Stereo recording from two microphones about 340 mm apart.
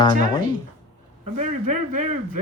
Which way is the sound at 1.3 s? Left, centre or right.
Right.